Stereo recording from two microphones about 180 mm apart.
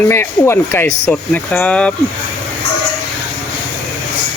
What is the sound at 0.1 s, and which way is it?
Speech, 15° left (ahead or behind).